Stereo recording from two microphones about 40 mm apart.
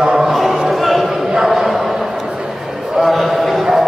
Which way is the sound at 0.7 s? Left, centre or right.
Centre.